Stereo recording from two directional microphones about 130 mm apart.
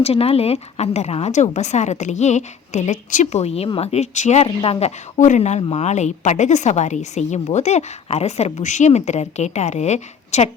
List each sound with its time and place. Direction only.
0.0 s a woman's voice: 50° left (ahead or behind)
4.4 s speech: 50° left (ahead or behind)
5.1 s a woman's voice: 70° left (ahead or behind)